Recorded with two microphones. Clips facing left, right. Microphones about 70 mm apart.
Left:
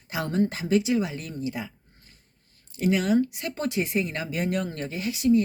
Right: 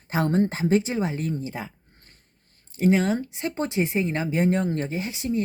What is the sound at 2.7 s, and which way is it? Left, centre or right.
Speech, right.